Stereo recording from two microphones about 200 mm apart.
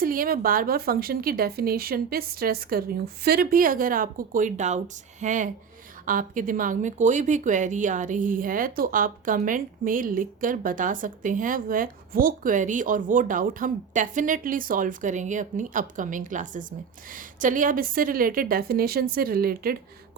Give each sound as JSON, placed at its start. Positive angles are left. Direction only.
{"t": 0.0, "sound": "speech", "side_deg": -45}